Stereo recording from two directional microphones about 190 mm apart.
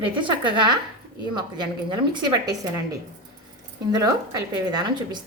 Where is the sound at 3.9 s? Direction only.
20° right (ahead or behind).